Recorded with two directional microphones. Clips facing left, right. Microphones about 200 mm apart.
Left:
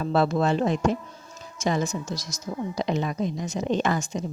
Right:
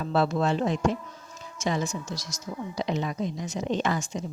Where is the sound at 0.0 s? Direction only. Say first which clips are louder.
Left 2 dB; 50° left (ahead or behind).